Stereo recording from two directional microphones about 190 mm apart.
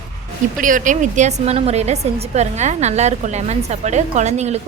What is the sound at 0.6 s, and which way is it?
A woman's voice, 45° right (ahead or behind).